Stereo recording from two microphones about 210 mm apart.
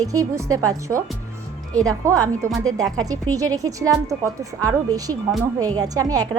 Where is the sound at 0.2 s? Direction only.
15° right (ahead or behind).